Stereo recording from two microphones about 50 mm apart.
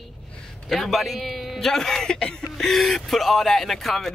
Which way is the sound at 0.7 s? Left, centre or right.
Centre.